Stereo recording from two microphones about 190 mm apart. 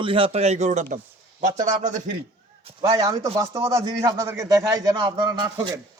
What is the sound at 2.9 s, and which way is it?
A man's voice, 20° right (ahead or behind).